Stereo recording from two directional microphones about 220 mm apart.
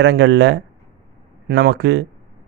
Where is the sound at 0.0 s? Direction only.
55° right (ahead or behind).